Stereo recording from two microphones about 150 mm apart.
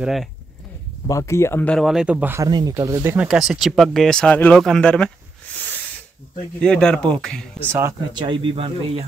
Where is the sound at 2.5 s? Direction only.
25° right (ahead or behind).